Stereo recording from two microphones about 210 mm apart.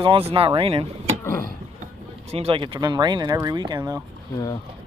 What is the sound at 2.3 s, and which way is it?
Speech, 25° right (ahead or behind).